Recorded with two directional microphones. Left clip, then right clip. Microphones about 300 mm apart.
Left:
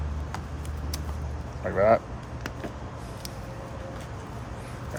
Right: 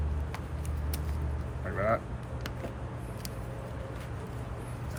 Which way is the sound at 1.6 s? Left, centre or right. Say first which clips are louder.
Left 9 dB; centre.